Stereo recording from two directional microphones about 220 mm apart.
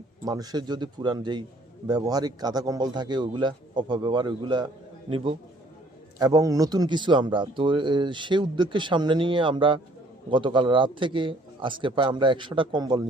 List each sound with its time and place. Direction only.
0.3 s speech: 15° right (ahead or behind)